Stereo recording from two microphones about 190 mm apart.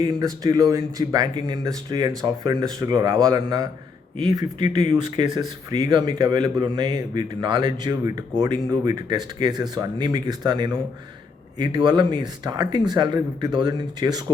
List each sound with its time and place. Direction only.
0.0 s speech: 20° right (ahead or behind)